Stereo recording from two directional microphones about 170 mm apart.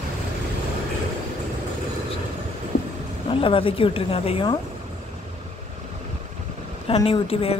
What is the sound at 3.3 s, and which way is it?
Speech, 30° left (ahead or behind).